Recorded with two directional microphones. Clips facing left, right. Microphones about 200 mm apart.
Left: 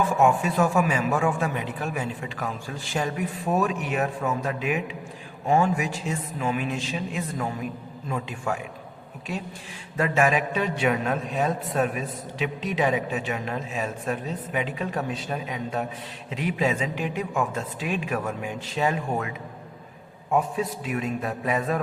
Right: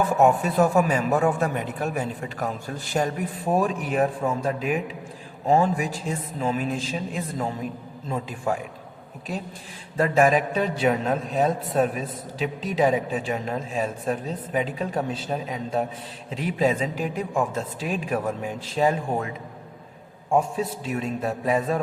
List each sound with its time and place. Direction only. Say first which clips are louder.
0.2 s a man's voice: right 3 dB; 40° right (ahead or behind)
10.0 s a man's voice: right 3 dB; 35° right (ahead or behind)
20.3 s a man's voice: right 2 dB; 30° right (ahead or behind)